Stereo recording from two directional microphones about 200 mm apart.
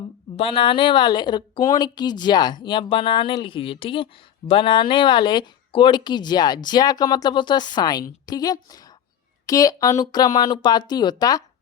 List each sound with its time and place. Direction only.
0.3 s speech: 25° left (ahead or behind)